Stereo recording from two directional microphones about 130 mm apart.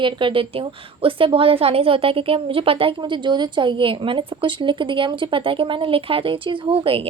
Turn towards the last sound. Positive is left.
turn(degrees=-45)  # may be behind; listen again after turning